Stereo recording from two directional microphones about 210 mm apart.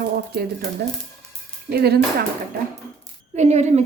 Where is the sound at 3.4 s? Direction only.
30° right (ahead or behind).